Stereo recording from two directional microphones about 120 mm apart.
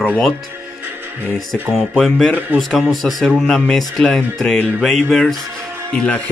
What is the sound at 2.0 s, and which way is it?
Speech, 5° left (ahead or behind).